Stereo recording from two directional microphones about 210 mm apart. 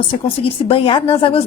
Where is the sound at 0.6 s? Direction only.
25° left (ahead or behind).